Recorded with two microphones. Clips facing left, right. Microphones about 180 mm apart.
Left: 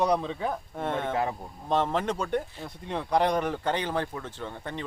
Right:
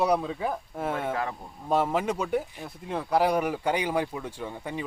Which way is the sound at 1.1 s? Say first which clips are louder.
Left 2 dB; 25° left (ahead or behind).